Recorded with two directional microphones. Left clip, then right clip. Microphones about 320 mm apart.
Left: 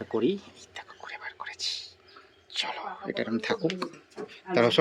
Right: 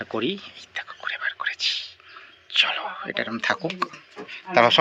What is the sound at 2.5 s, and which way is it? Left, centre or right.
Speech, centre.